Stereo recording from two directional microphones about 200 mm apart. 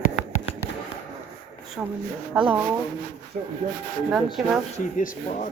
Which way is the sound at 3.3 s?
45° right (ahead or behind).